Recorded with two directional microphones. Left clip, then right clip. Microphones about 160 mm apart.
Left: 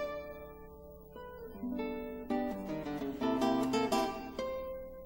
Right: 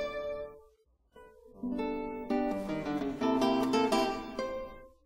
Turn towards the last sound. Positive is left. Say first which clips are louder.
# right 3 dB
turn(degrees=35)  # may be behind; listen again after turning